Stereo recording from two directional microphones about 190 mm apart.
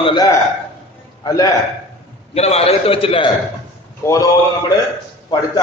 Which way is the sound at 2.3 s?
35° left (ahead or behind).